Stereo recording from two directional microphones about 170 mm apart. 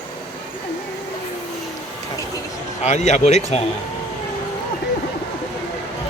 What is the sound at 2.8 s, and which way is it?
Speech, 40° left (ahead or behind).